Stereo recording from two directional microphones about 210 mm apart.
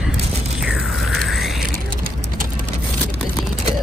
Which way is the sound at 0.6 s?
Centre (ahead or behind).